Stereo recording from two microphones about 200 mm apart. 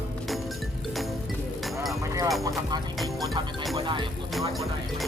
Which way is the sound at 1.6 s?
Centre (ahead or behind).